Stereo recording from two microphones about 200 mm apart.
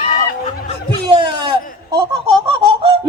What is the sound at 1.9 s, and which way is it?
Laughter, 25° right (ahead or behind).